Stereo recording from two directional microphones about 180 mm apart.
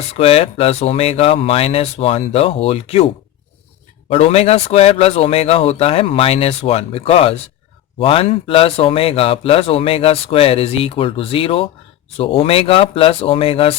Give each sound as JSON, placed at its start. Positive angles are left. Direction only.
{"t": 0.2, "sound": "speech", "side_deg": 35}
{"t": 4.1, "sound": "speech", "side_deg": 35}